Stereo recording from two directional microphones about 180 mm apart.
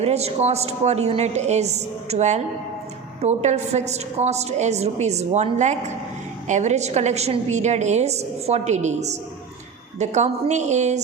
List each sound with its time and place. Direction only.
0.0 s a woman's voice: 35° right (ahead or behind)